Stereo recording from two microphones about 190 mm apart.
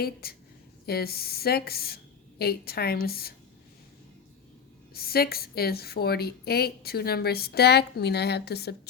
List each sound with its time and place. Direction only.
0.0 s a woman's voice: 55° left (ahead or behind)
4.9 s a woman's voice: 55° left (ahead or behind)